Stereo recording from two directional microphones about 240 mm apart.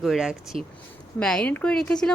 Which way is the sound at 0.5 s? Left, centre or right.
Right.